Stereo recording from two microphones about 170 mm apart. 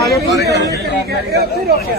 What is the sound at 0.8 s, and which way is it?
Speech, 65° right (ahead or behind).